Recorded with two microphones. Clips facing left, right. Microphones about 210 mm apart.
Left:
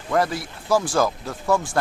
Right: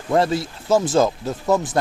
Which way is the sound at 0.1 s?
25° right (ahead or behind).